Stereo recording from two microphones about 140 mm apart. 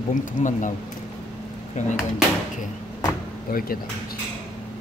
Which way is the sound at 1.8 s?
60° left (ahead or behind).